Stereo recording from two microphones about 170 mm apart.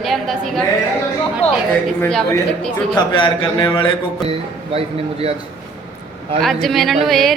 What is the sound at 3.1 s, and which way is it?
Speech, 30° left (ahead or behind).